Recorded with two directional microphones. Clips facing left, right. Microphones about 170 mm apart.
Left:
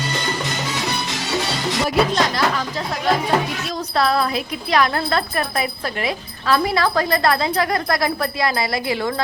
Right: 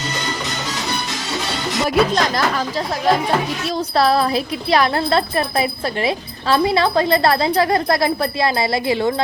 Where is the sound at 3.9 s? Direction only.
35° right (ahead or behind).